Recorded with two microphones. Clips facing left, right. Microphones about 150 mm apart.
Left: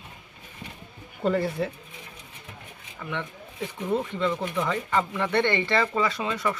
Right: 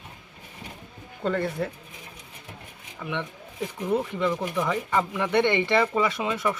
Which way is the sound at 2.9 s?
10° right (ahead or behind).